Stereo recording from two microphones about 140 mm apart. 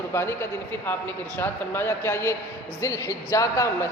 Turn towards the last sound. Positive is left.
turn(degrees=20)  # may be behind; listen again after turning